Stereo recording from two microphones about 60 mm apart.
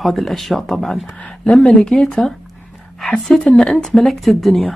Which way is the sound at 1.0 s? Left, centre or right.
Left.